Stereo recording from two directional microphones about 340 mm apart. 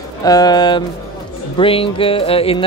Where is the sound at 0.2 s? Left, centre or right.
Centre.